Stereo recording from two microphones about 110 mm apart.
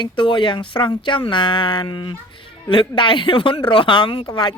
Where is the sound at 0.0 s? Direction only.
45° left (ahead or behind).